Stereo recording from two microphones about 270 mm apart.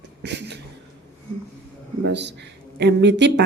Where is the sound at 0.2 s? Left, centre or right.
Right.